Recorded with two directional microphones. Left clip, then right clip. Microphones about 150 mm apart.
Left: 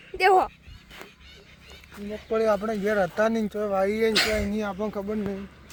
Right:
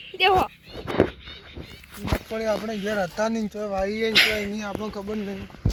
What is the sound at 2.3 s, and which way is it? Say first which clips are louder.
Speech: left 5 dB; 35° left (ahead or behind).